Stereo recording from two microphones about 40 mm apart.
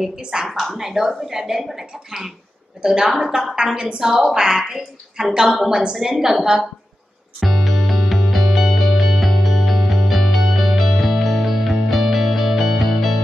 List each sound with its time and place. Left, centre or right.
0.2 s speech: centre
0.5 s speech: centre
0.7 s a woman's voice: centre
5.9 s speech: centre
7.3 s music: centre